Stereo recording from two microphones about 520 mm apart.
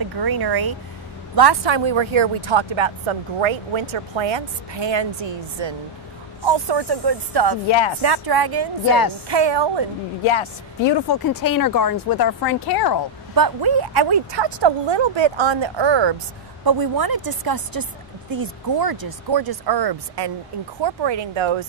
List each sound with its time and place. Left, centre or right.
0.0 s speech: right
8.8 s a woman's voice: left
9.3 s speech: right
10.2 s speech: left
13.3 s speech: right
16.6 s speech: right